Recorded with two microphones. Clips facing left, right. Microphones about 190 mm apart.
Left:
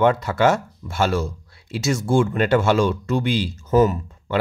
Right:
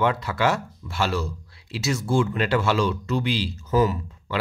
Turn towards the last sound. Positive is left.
turn(degrees=45)  # may be behind; listen again after turning